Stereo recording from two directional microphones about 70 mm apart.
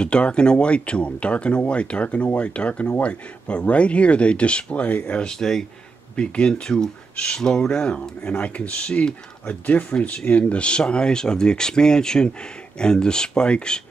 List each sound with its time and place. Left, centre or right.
0.0 s speech: centre